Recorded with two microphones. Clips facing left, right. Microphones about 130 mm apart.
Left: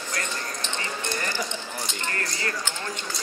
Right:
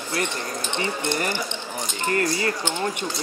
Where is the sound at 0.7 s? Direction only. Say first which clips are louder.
Right 7 dB; 20° right (ahead or behind).